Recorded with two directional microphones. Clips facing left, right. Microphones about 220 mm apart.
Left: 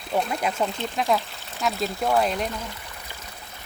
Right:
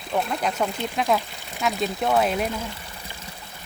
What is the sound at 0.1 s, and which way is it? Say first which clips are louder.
Speech: even; 5° left (ahead or behind).